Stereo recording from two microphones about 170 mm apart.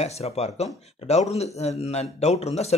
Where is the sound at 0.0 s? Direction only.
40° left (ahead or behind).